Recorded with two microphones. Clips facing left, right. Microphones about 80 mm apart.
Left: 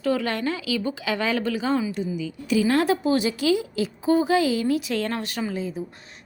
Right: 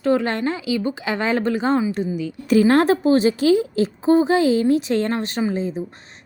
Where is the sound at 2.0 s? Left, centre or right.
Right.